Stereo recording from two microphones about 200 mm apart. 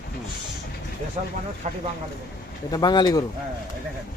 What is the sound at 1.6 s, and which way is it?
Speech, 35° right (ahead or behind).